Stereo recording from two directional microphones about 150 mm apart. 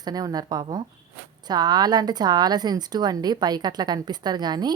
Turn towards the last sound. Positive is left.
turn(degrees=-30)  # may be behind; listen again after turning